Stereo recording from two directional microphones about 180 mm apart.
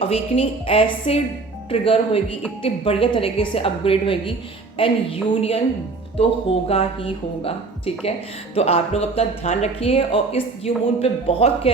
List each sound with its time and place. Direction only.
0.0 s speech: 35° left (ahead or behind)